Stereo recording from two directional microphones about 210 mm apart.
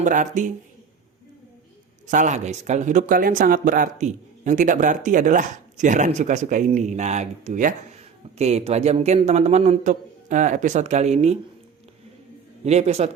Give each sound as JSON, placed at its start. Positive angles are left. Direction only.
{"t": 0.0, "sound": "speech", "side_deg": -35}
{"t": 2.0, "sound": "speech", "side_deg": -35}
{"t": 12.6, "sound": "speech", "side_deg": -30}